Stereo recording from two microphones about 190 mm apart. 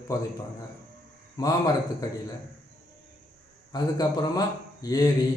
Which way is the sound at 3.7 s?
20° left (ahead or behind).